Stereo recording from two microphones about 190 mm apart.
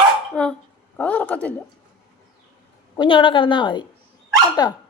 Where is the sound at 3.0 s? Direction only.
25° left (ahead or behind).